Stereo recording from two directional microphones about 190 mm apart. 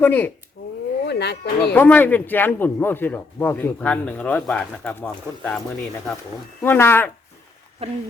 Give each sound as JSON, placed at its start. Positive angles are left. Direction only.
{"t": 0.0, "sound": "speech", "side_deg": 10}
{"t": 1.0, "sound": "speech", "side_deg": 60}
{"t": 1.7, "sound": "speech", "side_deg": 10}
{"t": 6.6, "sound": "speech", "side_deg": 10}
{"t": 7.8, "sound": "speech", "side_deg": -30}